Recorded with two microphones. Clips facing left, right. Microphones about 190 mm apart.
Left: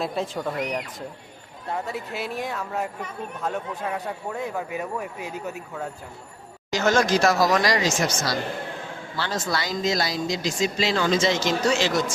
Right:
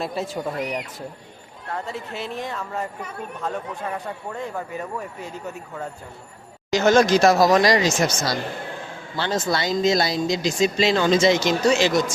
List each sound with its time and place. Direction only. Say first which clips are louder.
0.0 s speech: even; centre (ahead or behind)
6.7 s speech: right 5 dB; 20° right (ahead or behind)
9.1 s speech: right 4 dB; 20° right (ahead or behind)